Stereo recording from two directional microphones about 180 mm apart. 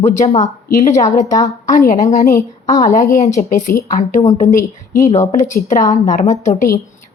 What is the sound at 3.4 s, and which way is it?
Speech, 45° left (ahead or behind).